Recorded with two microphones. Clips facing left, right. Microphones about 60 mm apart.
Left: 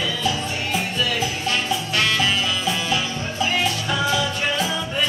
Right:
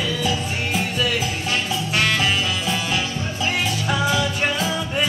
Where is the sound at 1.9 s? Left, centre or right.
Centre.